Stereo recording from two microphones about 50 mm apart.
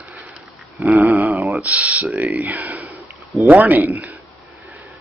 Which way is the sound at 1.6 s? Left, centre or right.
Right.